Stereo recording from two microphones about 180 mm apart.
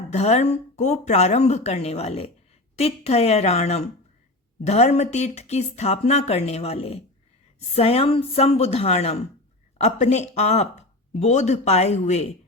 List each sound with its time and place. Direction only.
0.1 s speech: 35° left (ahead or behind)